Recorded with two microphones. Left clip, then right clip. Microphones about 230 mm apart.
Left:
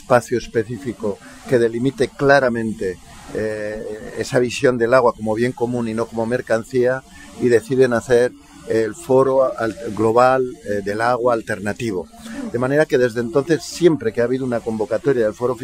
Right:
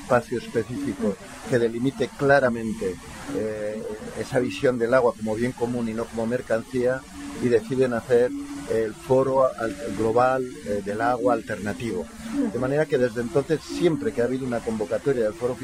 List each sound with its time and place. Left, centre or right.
0.1 s speech: left
4.2 s speech: left